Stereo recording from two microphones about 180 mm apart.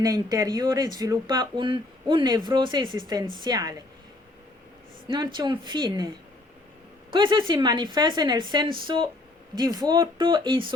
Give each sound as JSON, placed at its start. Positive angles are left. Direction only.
{"t": 0.0, "sound": "speech", "side_deg": -20}
{"t": 5.0, "sound": "speech", "side_deg": -25}
{"t": 7.1, "sound": "speech", "side_deg": -25}